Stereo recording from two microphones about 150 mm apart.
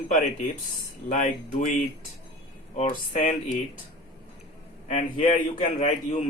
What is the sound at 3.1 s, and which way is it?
Speech, 50° left (ahead or behind).